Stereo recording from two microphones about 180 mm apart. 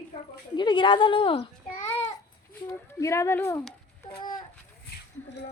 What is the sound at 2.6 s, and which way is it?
Speech, 15° left (ahead or behind).